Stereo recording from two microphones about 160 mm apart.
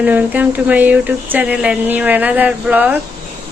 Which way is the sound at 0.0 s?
10° right (ahead or behind).